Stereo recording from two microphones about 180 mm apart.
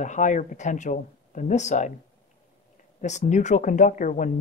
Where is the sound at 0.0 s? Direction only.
45° left (ahead or behind).